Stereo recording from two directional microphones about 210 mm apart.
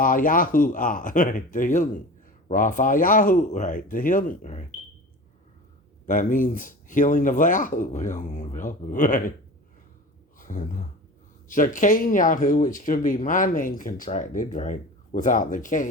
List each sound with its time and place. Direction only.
0.0 s speech: 40° left (ahead or behind)
6.1 s speech: 40° left (ahead or behind)
10.3 s speech: 40° left (ahead or behind)